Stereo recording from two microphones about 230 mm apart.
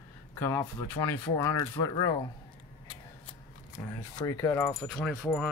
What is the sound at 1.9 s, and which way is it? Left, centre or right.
Speech, left.